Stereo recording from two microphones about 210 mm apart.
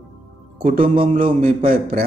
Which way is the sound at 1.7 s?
45° right (ahead or behind).